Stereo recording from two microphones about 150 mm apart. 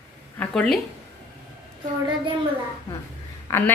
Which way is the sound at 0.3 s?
5° left (ahead or behind).